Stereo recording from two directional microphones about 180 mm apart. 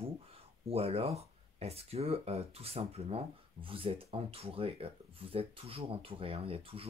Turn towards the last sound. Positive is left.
turn(degrees=-30)  # may be behind; listen again after turning